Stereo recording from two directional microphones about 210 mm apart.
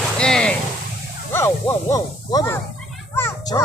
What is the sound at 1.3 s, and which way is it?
Speech, 10° left (ahead or behind).